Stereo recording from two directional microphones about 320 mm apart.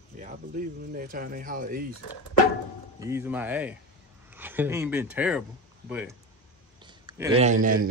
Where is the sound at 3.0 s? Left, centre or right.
Centre.